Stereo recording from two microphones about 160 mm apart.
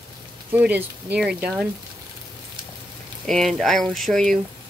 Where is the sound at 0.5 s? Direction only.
10° right (ahead or behind).